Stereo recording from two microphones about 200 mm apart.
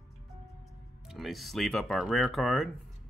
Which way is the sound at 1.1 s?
Centre (ahead or behind).